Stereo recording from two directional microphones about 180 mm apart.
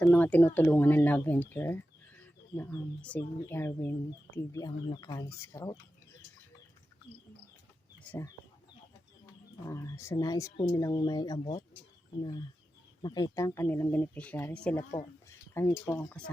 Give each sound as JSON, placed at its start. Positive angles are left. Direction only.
{"t": 0.0, "sound": "speech", "side_deg": 10}
{"t": 9.6, "sound": "speech", "side_deg": 15}
{"t": 13.0, "sound": "speech", "side_deg": 20}